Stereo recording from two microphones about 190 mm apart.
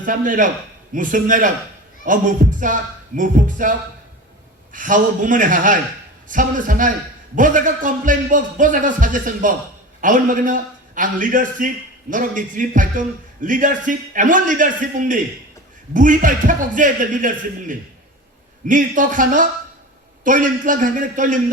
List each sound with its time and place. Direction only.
0.0 s a man's voice: 45° right (ahead or behind)